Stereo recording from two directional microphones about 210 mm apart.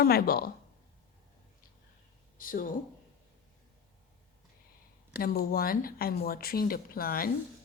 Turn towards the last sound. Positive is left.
turn(degrees=45)  # may be behind; listen again after turning